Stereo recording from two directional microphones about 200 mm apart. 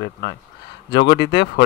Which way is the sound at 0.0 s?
65° left (ahead or behind).